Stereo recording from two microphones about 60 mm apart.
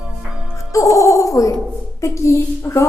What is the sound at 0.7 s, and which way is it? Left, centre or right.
A woman's voice, left.